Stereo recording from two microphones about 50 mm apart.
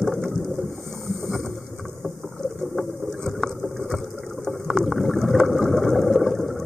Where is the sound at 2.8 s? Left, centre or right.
Centre.